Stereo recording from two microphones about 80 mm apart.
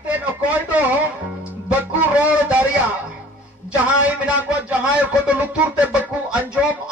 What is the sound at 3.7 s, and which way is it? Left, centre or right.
A man's voice, centre.